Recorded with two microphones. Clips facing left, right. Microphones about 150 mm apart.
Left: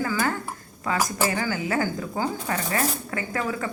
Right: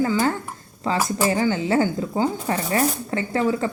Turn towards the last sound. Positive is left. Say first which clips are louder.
# right 6 dB
turn(degrees=-30)  # may be behind; listen again after turning